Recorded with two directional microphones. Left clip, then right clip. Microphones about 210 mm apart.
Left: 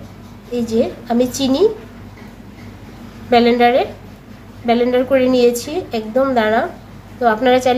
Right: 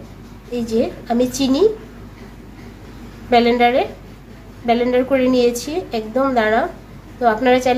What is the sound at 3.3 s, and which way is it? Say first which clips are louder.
A woman's voice: left 2 dB; centre (ahead or behind).